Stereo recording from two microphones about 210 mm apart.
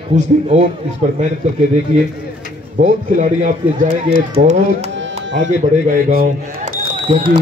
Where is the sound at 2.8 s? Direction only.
35° right (ahead or behind).